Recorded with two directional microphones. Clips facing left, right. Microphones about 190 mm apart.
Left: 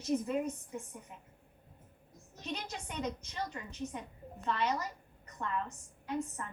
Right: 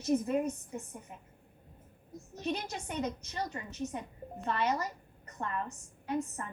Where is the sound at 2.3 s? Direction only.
45° right (ahead or behind).